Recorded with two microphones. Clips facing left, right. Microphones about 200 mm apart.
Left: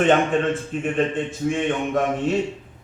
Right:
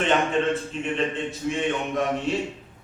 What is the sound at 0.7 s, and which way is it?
Speech, 50° left (ahead or behind).